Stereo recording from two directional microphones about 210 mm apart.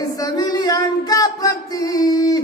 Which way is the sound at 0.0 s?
20° left (ahead or behind).